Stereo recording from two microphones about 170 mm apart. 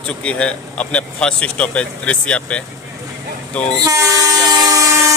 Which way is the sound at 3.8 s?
20° right (ahead or behind).